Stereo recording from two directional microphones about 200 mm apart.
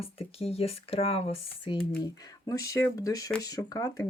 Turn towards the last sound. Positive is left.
turn(degrees=15)  # may be behind; listen again after turning